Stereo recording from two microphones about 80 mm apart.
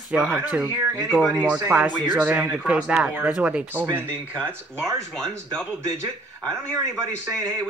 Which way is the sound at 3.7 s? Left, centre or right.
Right.